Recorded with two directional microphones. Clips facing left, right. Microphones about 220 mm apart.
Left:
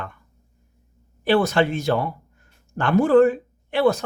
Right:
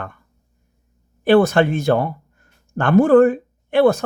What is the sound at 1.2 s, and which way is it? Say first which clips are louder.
Speech: right 5 dB; 50° right (ahead or behind).